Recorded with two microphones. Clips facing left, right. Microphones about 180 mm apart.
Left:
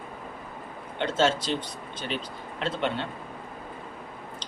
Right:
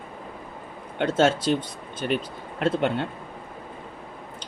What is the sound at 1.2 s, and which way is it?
Speech, 55° right (ahead or behind).